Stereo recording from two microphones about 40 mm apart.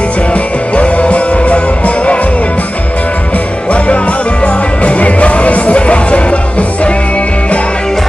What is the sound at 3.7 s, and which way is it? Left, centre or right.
Music, left.